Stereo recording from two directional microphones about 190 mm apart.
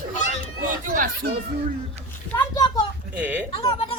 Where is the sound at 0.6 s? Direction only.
45° right (ahead or behind).